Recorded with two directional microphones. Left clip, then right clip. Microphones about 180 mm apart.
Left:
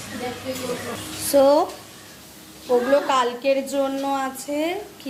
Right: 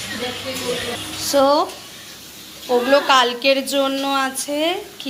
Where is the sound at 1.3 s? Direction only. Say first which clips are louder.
Even; 30° left (ahead or behind).